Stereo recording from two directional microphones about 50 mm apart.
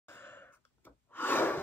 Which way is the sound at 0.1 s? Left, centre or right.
Left.